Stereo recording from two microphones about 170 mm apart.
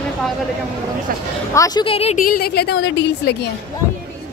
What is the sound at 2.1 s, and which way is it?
A woman's voice, 55° left (ahead or behind).